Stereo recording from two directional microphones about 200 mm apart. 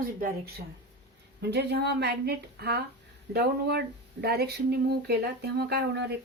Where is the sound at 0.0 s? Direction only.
50° right (ahead or behind).